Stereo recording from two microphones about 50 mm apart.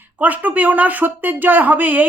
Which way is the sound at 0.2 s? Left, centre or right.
Right.